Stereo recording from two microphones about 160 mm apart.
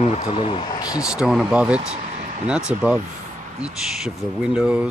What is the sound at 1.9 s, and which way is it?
Vehicle, 45° right (ahead or behind).